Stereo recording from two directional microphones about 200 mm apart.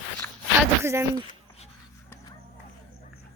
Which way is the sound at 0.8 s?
15° right (ahead or behind).